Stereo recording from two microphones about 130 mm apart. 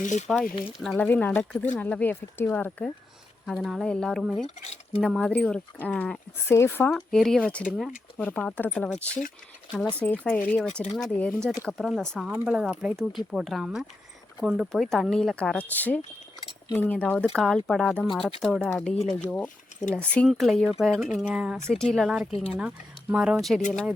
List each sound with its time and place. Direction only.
0.0 s speech: 70° left (ahead or behind)
0.3 s speech: 5° left (ahead or behind)
1.0 s speech: 15° left (ahead or behind)
6.9 s speech: 5° left (ahead or behind)
8.2 s speech: 10° left (ahead or behind)
20.2 s speech: centre (ahead or behind)